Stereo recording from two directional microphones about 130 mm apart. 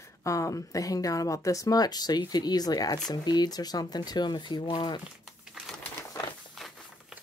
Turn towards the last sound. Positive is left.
turn(degrees=0)  # may be behind; listen again after turning